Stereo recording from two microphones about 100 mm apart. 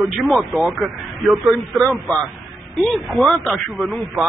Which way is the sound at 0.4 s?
Centre (ahead or behind).